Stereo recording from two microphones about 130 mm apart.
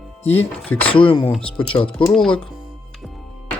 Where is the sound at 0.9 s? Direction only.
40° left (ahead or behind).